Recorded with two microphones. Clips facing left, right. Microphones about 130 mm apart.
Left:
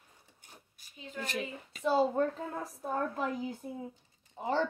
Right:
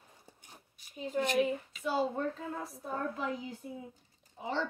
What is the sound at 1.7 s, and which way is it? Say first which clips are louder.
Speech: left 4 dB; 35° left (ahead or behind).